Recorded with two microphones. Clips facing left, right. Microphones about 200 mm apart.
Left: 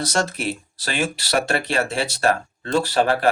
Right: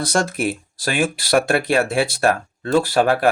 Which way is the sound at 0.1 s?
50° right (ahead or behind).